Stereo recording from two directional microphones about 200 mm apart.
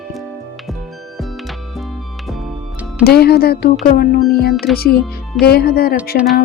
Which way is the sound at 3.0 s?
50° left (ahead or behind).